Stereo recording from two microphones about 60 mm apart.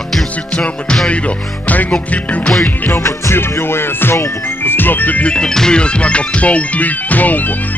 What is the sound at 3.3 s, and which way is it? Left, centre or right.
Music, left.